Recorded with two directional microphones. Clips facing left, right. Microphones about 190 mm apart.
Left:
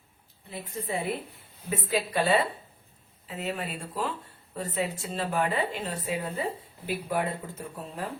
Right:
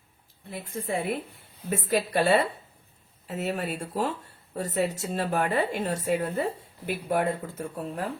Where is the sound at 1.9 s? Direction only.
45° right (ahead or behind).